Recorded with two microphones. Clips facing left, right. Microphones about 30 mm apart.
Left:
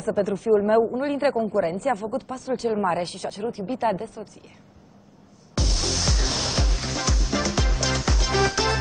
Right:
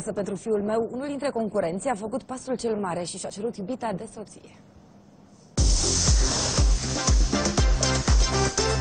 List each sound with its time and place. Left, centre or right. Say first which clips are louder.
0.0 s speech: left 6 dB; left
1.3 s speech: left 3 dB; centre
2.8 s speech: left 5 dB; left
5.5 s music: left 1 dB; left
7.0 s music: even; centre
8.4 s music: left 4 dB; left